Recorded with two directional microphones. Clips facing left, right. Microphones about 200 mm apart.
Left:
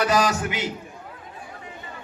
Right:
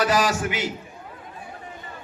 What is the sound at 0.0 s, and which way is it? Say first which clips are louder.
Speech: even; 20° left (ahead or behind).